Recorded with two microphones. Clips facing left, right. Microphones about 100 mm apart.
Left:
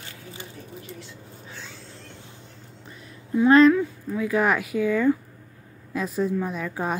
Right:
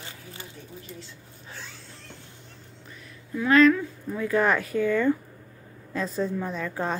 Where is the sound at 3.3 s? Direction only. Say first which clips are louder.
Left 3 dB; 30° left (ahead or behind).